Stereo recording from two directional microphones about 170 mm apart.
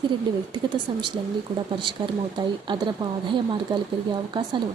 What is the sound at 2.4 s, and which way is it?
Speech, 25° right (ahead or behind).